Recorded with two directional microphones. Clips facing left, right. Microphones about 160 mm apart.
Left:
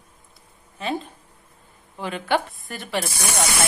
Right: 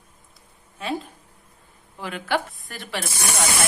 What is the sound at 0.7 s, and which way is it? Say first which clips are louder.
A woman's voice: left 1 dB; centre (ahead or behind).